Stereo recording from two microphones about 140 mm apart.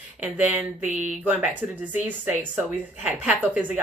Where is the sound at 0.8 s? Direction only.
60° right (ahead or behind).